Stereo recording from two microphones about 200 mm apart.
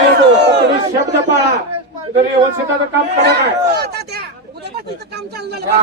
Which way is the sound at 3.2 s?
55° right (ahead or behind).